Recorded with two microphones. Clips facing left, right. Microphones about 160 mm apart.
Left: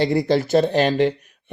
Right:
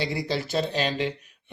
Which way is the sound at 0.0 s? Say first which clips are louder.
Left 10 dB; 50° left (ahead or behind).